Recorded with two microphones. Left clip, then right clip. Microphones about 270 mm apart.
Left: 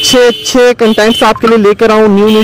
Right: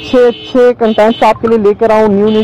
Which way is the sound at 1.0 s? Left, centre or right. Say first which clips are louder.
Right 2 dB; left.